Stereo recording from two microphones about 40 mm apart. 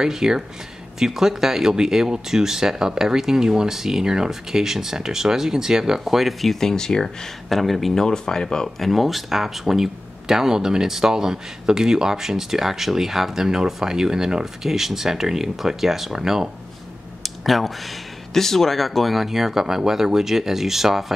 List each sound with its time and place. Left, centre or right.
0.0 s speech: centre
6.7 s speech: centre
7.4 s speech: centre
8.7 s speech: centre
17.2 s speech: centre